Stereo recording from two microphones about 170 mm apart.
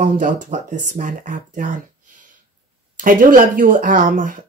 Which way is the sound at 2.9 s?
55° right (ahead or behind).